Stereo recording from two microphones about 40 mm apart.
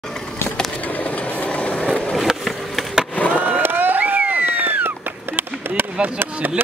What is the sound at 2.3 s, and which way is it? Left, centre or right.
Skateboard, centre.